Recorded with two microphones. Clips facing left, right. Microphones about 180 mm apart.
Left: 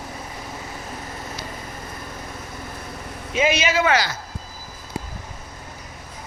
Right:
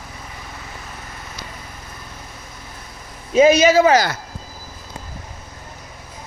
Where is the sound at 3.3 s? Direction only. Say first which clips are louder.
Right 9 dB; 40° right (ahead or behind).